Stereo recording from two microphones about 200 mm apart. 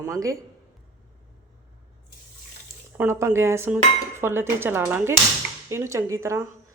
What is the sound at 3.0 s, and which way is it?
A woman's voice, 15° right (ahead or behind).